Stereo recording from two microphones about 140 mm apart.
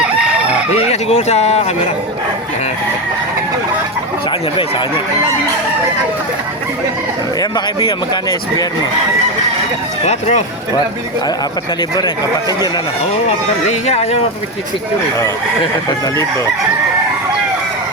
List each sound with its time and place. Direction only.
0.7 s speech: 50° left (ahead or behind)
7.9 s speech: 30° left (ahead or behind)
10.0 s speech: 50° left (ahead or behind)
11.8 s speech: 35° left (ahead or behind)
13.8 s speech: 45° left (ahead or behind)